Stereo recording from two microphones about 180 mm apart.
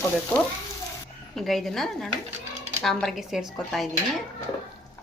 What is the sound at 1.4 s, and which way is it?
Speech, centre (ahead or behind).